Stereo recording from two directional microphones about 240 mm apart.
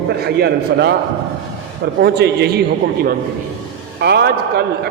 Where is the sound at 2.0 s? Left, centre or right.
Right.